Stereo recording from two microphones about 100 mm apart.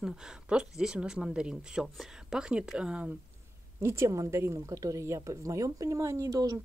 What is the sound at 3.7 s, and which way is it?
A woman's voice, 25° right (ahead or behind).